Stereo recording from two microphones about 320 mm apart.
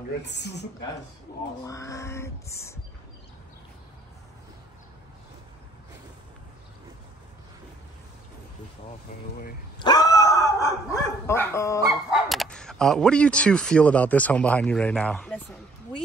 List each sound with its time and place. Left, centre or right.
0.2 s a woman's voice: left
1.6 s a sound: centre
9.8 s speech: centre